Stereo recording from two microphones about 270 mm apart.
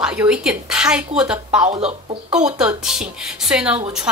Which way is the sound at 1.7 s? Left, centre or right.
Centre.